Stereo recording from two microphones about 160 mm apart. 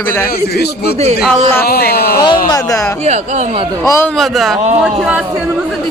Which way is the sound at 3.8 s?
15° left (ahead or behind).